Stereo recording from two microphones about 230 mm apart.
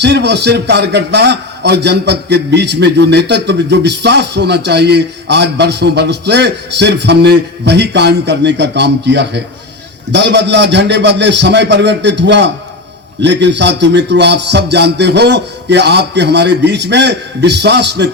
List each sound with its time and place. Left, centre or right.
0.0 s a man's voice: right